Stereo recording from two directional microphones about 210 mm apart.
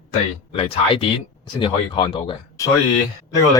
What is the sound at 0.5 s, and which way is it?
Speech, 25° left (ahead or behind).